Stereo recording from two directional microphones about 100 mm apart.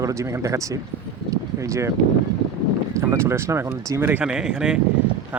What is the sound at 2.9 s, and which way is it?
Speech, 30° right (ahead or behind).